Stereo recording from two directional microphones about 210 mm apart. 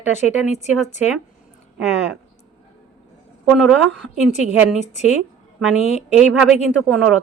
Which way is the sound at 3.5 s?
Centre (ahead or behind).